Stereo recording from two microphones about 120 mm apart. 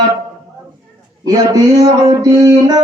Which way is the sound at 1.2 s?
30° right (ahead or behind).